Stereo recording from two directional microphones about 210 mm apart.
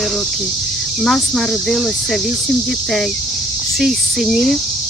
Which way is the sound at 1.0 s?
Centre (ahead or behind).